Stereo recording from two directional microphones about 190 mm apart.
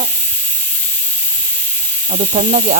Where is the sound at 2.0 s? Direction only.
45° right (ahead or behind).